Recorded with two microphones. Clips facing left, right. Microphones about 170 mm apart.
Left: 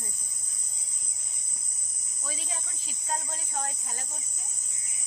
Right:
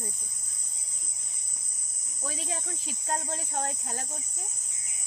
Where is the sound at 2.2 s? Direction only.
60° right (ahead or behind).